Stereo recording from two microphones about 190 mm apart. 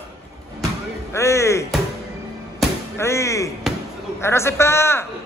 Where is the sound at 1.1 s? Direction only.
15° left (ahead or behind).